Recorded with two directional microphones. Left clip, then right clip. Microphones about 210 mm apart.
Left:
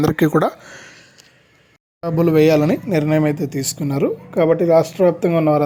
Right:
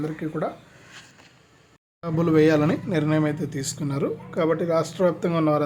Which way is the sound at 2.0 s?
20° left (ahead or behind).